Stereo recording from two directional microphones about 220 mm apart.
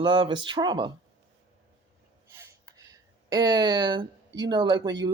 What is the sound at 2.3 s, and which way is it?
Speech, 15° right (ahead or behind).